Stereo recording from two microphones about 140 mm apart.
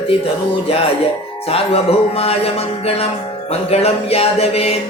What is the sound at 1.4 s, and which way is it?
Music, 45° left (ahead or behind).